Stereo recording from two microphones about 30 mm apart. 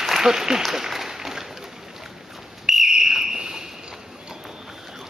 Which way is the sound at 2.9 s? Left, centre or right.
Centre.